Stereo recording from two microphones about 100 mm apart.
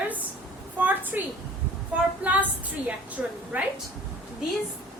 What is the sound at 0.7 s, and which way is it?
Speech, 15° right (ahead or behind).